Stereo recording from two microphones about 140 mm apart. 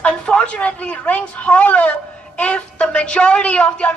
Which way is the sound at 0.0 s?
5° left (ahead or behind).